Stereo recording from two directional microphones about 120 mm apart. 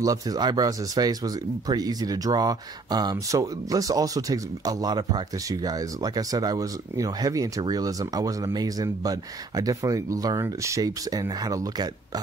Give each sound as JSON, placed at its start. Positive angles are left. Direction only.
{"t": 0.0, "sound": "speech", "side_deg": -30}